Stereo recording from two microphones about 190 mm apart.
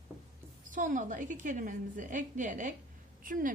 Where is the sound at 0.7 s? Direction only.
45° right (ahead or behind).